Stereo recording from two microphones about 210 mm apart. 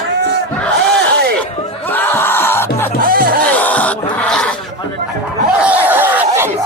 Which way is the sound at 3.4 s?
5° left (ahead or behind).